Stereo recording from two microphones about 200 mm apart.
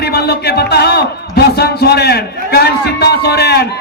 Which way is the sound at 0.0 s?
55° left (ahead or behind).